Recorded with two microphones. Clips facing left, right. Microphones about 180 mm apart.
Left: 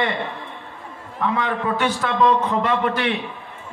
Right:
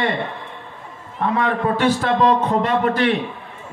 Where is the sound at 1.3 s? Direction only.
35° right (ahead or behind).